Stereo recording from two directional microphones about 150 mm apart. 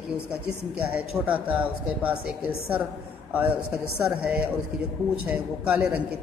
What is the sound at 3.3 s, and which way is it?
A woman's voice, 10° right (ahead or behind).